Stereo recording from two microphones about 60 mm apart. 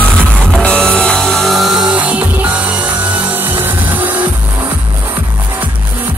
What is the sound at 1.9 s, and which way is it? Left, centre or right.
Music, right.